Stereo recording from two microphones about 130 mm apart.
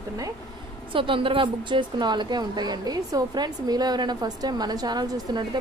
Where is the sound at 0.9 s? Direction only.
40° right (ahead or behind).